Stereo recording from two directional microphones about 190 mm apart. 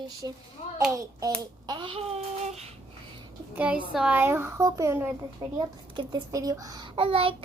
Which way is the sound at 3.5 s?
5° right (ahead or behind).